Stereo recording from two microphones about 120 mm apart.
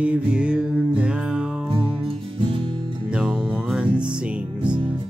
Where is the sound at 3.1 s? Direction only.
5° right (ahead or behind).